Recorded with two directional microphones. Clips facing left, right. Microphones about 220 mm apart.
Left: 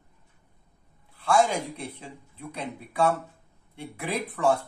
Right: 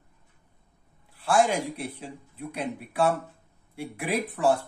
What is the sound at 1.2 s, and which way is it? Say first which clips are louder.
Speech: even; 5° right (ahead or behind).